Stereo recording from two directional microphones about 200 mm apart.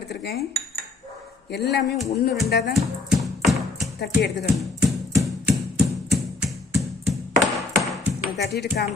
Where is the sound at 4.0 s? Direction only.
55° left (ahead or behind).